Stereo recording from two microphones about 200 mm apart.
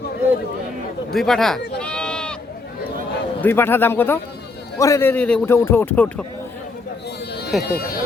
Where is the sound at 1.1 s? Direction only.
Centre (ahead or behind).